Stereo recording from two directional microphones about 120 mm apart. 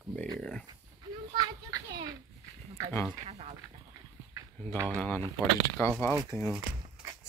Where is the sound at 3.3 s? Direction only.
60° right (ahead or behind).